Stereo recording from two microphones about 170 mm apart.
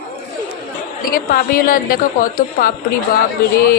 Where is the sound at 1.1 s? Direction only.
55° left (ahead or behind).